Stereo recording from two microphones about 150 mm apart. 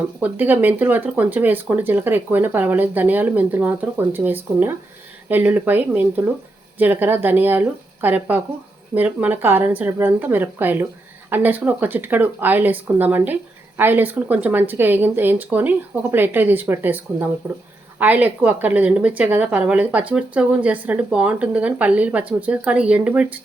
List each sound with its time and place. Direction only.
0.2 s a woman's voice: 10° right (ahead or behind)